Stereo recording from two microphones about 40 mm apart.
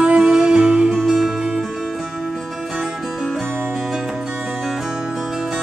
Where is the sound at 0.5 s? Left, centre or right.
Right.